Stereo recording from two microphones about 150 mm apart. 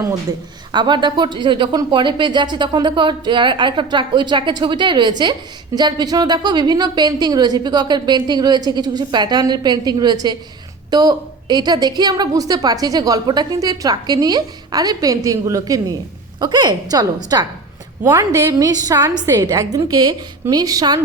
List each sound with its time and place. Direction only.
0.7 s speech: 30° right (ahead or behind)